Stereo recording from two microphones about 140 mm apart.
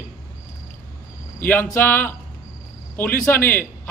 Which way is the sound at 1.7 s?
15° left (ahead or behind).